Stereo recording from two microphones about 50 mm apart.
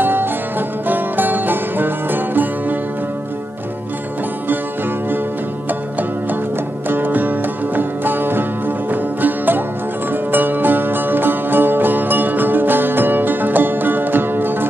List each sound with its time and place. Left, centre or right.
0.0 s music: right
6.9 s music: right